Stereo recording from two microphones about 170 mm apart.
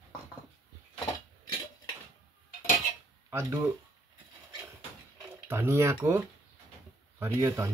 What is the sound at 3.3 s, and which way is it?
Speech, 15° right (ahead or behind).